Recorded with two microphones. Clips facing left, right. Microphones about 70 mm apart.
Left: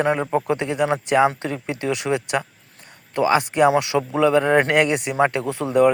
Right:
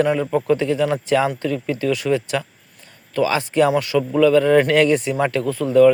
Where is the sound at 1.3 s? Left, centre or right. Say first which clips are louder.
Right 4 dB; left.